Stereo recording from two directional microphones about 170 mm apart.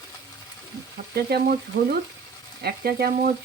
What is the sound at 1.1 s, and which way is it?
Frying, 65° right (ahead or behind).